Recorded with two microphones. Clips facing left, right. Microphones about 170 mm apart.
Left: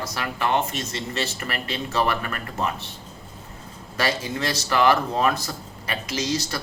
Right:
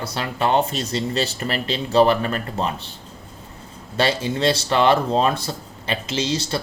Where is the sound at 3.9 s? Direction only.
30° right (ahead or behind).